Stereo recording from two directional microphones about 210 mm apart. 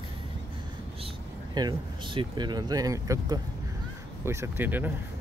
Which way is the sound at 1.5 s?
20° right (ahead or behind).